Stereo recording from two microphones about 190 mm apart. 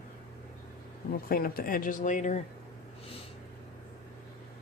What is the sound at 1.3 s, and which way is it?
Speech, 50° left (ahead or behind).